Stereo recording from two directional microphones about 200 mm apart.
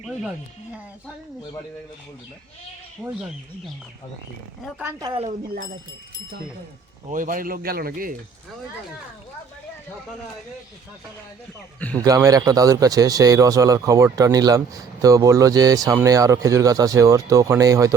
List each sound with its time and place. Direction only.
4.6 s a man's voice: 10° right (ahead or behind)
5.0 s a woman's voice: 30° right (ahead or behind)
7.1 s speech: 40° right (ahead or behind)
11.9 s a man's voice: 15° right (ahead or behind)